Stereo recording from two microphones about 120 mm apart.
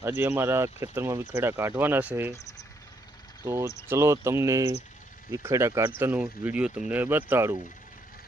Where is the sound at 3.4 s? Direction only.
20° right (ahead or behind).